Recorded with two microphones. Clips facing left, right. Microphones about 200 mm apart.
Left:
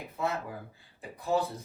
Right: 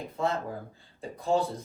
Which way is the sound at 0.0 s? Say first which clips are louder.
Right 3 dB; 45° right (ahead or behind).